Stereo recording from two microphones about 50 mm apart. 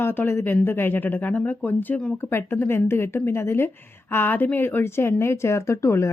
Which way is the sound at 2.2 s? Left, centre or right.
Left.